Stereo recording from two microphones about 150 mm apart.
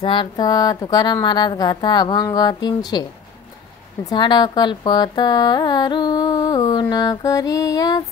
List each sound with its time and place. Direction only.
0.0 s speech: 35° left (ahead or behind)